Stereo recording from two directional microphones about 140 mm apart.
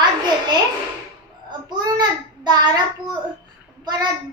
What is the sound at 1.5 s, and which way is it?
Child singing, 30° right (ahead or behind).